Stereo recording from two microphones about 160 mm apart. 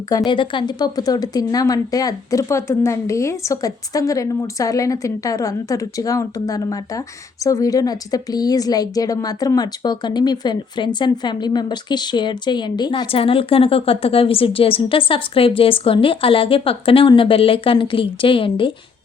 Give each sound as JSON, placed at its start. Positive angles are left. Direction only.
{"t": 0.1, "sound": "a woman's voice", "side_deg": 25}